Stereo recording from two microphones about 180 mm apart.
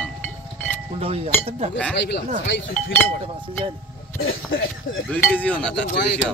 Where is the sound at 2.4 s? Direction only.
85° left.